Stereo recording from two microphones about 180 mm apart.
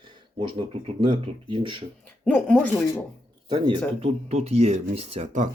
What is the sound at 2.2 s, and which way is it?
Speech, 5° left (ahead or behind).